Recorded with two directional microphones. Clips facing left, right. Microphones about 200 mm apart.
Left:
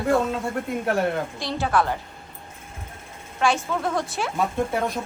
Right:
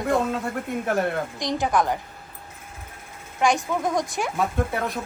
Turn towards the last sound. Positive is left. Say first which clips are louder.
# left 2 dB
turn(degrees=0)  # may be behind; listen again after turning